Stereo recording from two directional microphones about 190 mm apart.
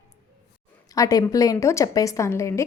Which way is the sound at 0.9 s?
20° left (ahead or behind).